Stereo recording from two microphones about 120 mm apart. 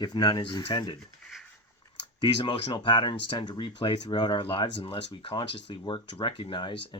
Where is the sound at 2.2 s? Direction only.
40° left (ahead or behind).